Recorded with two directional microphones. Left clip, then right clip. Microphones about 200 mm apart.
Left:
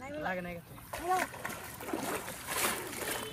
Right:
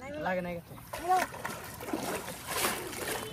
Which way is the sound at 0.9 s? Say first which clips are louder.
Right 4 dB; centre (ahead or behind).